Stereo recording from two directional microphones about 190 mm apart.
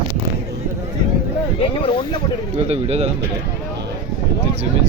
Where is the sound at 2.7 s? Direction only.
35° right (ahead or behind).